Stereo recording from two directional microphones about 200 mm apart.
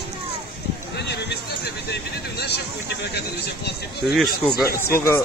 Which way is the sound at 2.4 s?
55° left (ahead or behind).